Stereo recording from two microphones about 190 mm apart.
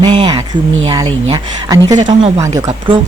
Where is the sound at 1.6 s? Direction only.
20° right (ahead or behind).